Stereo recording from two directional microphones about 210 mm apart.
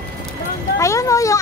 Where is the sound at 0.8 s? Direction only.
15° left (ahead or behind).